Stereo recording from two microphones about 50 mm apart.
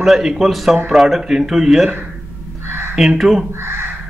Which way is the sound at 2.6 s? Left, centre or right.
Right.